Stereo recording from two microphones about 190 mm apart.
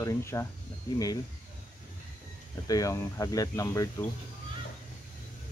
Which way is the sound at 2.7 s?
15° left (ahead or behind).